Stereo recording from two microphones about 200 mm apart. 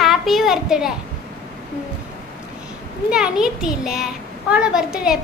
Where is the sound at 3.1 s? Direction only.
5° right (ahead or behind).